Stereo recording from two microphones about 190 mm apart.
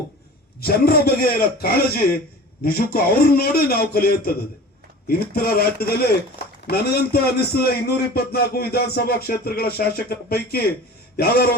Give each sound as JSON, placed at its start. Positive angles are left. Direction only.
{"t": 0.6, "sound": "a man's voice", "side_deg": 55}